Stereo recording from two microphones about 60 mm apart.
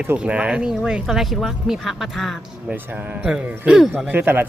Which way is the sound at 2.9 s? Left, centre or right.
Right.